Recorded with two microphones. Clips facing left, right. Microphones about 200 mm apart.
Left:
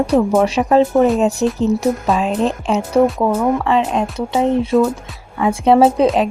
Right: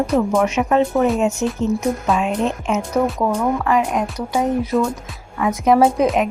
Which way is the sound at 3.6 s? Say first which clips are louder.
Left 2 dB; 25° left (ahead or behind).